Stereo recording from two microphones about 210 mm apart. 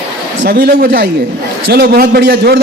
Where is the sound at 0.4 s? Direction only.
45° right (ahead or behind).